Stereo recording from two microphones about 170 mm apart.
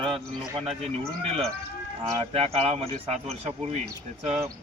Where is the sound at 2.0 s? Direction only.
35° right (ahead or behind).